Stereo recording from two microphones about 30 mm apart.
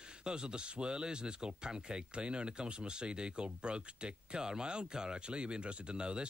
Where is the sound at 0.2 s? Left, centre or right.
Right.